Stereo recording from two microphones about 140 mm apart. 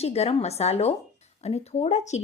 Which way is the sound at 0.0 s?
45° left (ahead or behind).